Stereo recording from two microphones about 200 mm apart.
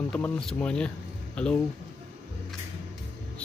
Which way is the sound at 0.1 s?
5° left (ahead or behind).